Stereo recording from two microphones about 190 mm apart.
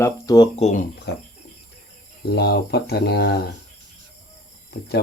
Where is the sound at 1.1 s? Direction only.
60° left (ahead or behind).